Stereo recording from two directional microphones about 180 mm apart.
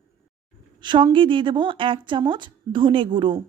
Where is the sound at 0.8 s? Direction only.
25° right (ahead or behind).